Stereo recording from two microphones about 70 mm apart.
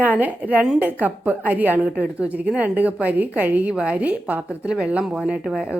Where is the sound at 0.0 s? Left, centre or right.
Right.